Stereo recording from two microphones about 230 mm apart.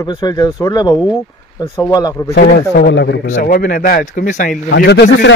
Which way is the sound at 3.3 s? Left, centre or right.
Left.